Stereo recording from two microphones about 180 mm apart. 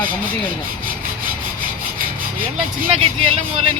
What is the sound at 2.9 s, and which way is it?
Speech, 35° right (ahead or behind).